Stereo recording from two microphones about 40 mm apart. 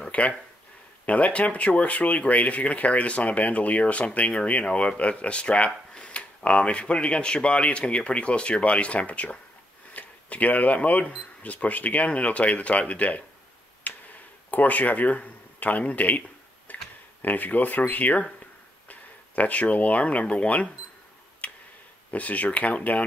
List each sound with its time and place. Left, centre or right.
0.1 s speech: left
13.9 s tick-tock: left
14.5 s speech: left
21.4 s tick-tock: left
22.1 s speech: left